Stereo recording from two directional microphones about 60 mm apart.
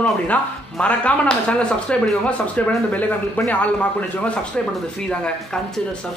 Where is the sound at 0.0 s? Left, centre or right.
Left.